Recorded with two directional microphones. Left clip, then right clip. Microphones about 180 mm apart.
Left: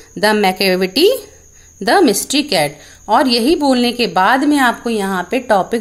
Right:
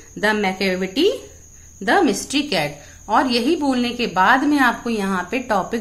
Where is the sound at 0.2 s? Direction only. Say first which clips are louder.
Left 6 dB; 55° left (ahead or behind).